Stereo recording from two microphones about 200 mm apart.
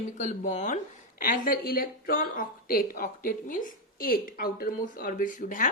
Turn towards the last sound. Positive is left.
turn(degrees=40)  # may be behind; listen again after turning